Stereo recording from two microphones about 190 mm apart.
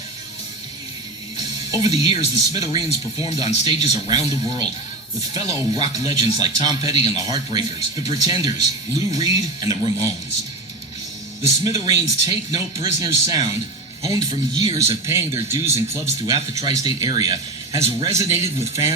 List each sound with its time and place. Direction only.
1.4 s speech: 20° right (ahead or behind)
11.6 s speech: 15° right (ahead or behind)